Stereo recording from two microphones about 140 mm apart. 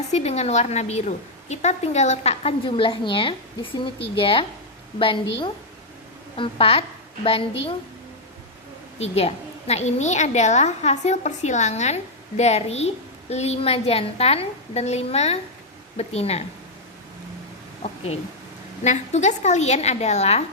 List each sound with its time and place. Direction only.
0.1 s a woman's voice: 50° left (ahead or behind)
9.0 s a woman's voice: 45° left (ahead or behind)
18.8 s a woman's voice: 55° left (ahead or behind)